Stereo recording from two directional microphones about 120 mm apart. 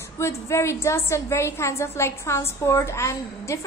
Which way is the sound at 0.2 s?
25° left (ahead or behind).